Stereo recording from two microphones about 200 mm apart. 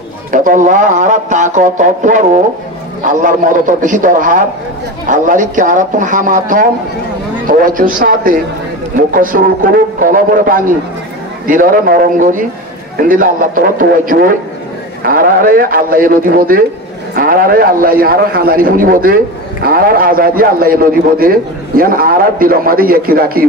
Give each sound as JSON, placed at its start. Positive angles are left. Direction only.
{"t": 0.3, "sound": "a man's voice", "side_deg": -40}